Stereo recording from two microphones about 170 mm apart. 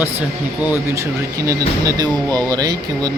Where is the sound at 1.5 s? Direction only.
20° right (ahead or behind).